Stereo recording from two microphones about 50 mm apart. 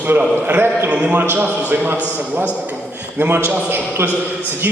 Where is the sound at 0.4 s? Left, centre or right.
Right.